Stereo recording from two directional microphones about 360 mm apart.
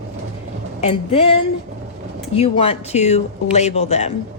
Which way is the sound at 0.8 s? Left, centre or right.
Centre.